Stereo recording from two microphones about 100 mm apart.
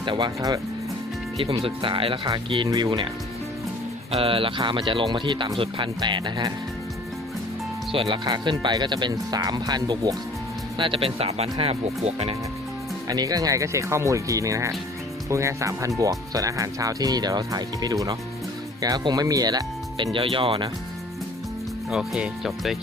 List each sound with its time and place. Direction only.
0.0 s speech: 55° right (ahead or behind)
1.5 s speech: 60° right (ahead or behind)
2.6 s speech: 35° right (ahead or behind)
4.1 s speech: 65° right (ahead or behind)
5.5 s speech: 60° right (ahead or behind)
6.0 s speech: 50° right (ahead or behind)
7.9 s speech: 55° right (ahead or behind)
10.8 s speech: 60° right (ahead or behind); by 12.4 s 85° right
13.1 s speech: 35° right (ahead or behind)
20.1 s speech: 60° right (ahead or behind)
21.8 s speech: 5° right (ahead or behind)